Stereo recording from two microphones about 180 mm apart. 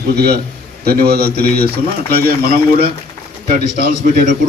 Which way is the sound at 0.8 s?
60° right (ahead or behind).